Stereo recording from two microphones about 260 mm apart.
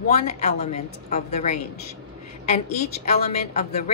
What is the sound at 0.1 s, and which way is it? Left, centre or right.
A woman's voice, left.